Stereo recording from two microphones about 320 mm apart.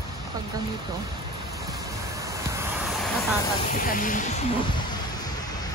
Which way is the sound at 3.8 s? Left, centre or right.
Left.